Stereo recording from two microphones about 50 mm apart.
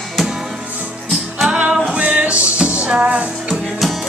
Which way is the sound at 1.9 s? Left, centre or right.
Right.